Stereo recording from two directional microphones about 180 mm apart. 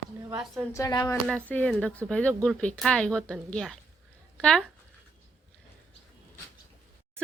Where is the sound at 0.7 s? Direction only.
20° left (ahead or behind).